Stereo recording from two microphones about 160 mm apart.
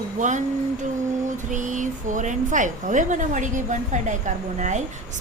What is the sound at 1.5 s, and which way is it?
A woman's voice, 50° right (ahead or behind).